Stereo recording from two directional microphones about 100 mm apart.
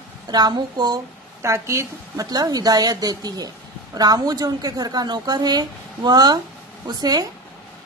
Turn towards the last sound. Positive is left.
turn(degrees=-40)  # may be behind; listen again after turning